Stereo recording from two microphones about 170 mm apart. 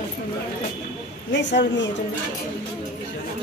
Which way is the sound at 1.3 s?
90° left.